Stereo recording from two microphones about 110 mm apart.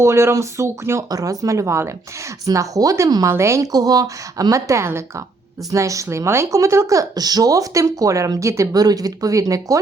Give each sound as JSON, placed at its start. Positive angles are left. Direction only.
{"t": 0.0, "sound": "speech", "side_deg": -25}